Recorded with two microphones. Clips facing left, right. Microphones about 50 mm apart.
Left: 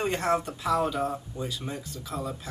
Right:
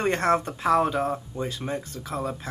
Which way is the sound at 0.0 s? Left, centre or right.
Right.